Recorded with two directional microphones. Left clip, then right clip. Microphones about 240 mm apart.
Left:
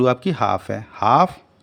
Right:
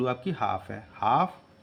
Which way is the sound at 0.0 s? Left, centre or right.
Left.